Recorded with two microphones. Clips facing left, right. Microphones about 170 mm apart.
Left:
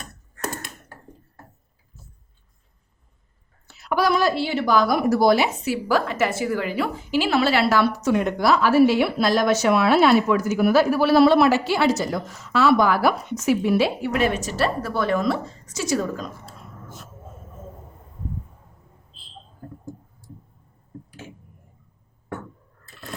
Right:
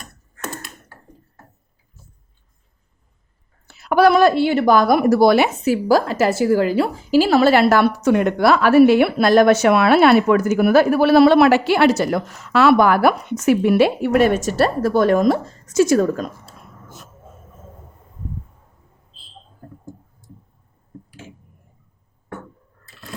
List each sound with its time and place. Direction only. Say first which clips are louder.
3.7 s a woman's voice: right 7 dB; 60° right (ahead or behind)
5.6 s a woman's voice: right 6 dB; 40° right (ahead or behind)